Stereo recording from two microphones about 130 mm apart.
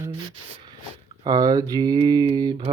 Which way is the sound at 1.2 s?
30° right (ahead or behind).